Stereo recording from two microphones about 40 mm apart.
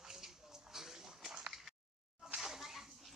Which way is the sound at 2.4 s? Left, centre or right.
Centre.